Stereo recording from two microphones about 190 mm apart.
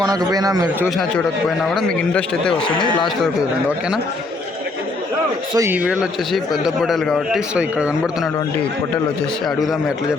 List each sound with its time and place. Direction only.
0.0 s a man's voice: 20° right (ahead or behind)
0.9 s a man's voice: centre (ahead or behind)
2.6 s a man's voice: 25° left (ahead or behind)
5.5 s a man's voice: 10° right (ahead or behind)